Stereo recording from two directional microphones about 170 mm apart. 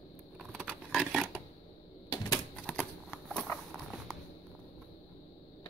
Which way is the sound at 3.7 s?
Centre (ahead or behind).